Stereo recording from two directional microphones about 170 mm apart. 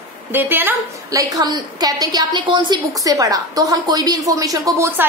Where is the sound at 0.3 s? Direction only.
10° right (ahead or behind).